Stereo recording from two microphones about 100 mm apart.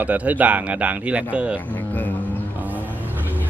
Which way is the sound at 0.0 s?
15° right (ahead or behind).